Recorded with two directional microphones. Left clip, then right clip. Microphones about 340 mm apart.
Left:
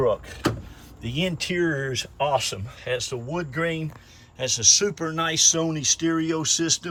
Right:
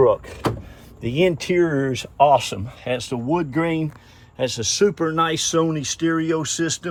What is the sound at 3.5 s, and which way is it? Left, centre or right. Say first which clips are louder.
Speech: right 5 dB; centre.